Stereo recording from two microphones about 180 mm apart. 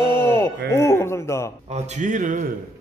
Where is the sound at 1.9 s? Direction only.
45° right (ahead or behind).